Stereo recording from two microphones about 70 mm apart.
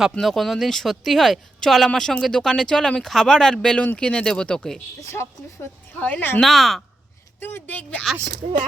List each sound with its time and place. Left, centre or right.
0.2 s speech: centre
6.0 s speech: left
6.4 s speech: centre
7.3 s speech: left